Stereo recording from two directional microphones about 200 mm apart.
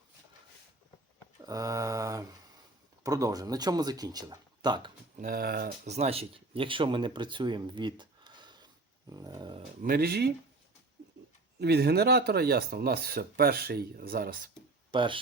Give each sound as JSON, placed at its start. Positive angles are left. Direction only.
{"t": 1.5, "sound": "mantra", "side_deg": -15}
{"t": 3.0, "sound": "speech", "side_deg": -15}
{"t": 5.1, "sound": "speech", "side_deg": -45}
{"t": 5.9, "sound": "speech", "side_deg": -30}
{"t": 9.8, "sound": "speech", "side_deg": -50}
{"t": 11.6, "sound": "speech", "side_deg": -55}
{"t": 14.9, "sound": "speech", "side_deg": -25}